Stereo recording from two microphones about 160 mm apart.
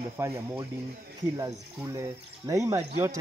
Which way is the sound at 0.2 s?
15° right (ahead or behind).